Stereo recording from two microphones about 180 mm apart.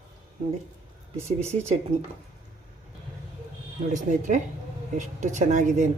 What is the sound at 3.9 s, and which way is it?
Speech, 45° right (ahead or behind).